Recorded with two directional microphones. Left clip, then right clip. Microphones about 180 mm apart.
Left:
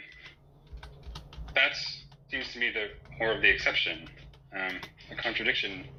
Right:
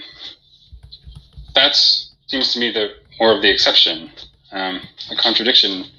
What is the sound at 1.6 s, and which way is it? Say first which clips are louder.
Speech: right 16 dB; 50° right (ahead or behind).